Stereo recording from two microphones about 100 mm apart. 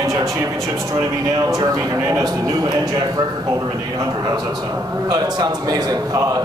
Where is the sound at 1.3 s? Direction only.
40° right (ahead or behind).